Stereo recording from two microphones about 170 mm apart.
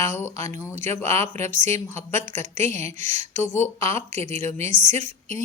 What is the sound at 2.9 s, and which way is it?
Speech, 45° right (ahead or behind).